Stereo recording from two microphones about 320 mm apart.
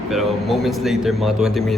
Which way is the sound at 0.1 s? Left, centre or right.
Centre.